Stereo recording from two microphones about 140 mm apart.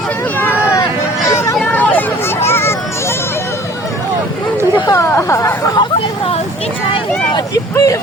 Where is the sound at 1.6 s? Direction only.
10° left (ahead or behind).